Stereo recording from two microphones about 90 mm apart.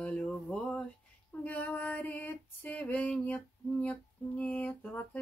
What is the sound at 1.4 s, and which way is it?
Female singing, 20° left (ahead or behind).